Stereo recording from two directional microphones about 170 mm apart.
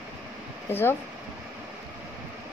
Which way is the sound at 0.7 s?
10° left (ahead or behind).